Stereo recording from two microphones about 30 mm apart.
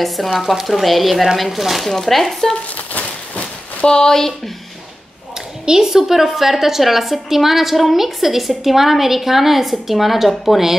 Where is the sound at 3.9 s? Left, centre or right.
Left.